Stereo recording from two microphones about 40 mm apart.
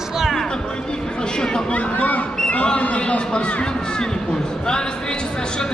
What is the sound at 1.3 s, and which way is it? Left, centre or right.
Speech, centre.